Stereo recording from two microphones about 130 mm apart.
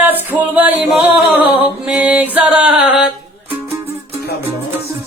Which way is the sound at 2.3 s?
10° right (ahead or behind).